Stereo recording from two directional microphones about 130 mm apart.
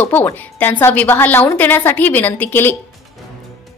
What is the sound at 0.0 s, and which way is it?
A woman's voice, 15° left (ahead or behind).